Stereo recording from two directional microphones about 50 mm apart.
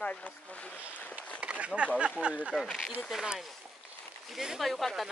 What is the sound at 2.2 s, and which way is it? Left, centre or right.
Speech, left.